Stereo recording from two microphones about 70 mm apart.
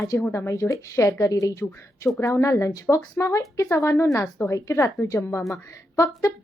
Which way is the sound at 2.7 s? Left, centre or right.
Left.